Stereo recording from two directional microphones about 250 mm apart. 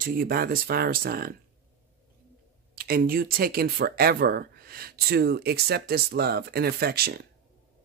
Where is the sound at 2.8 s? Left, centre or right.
Right.